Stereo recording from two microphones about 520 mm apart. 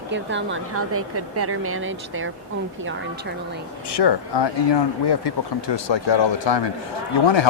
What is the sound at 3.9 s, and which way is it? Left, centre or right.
Speech, left.